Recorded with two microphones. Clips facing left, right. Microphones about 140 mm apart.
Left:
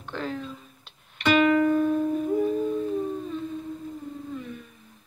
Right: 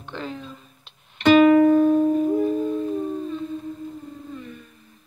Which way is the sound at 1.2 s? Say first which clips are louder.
Right 7 dB; 40° right (ahead or behind).